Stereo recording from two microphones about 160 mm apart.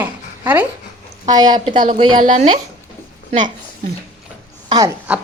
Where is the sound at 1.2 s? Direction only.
25° right (ahead or behind).